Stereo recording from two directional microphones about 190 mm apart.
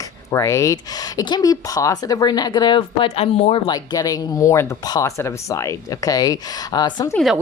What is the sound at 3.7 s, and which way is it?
Speech, 20° left (ahead or behind).